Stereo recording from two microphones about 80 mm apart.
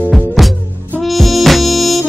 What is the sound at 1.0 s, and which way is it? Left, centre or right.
Music, centre.